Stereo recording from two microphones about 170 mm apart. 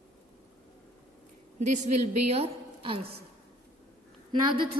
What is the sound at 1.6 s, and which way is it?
A woman's voice, 45° right (ahead or behind).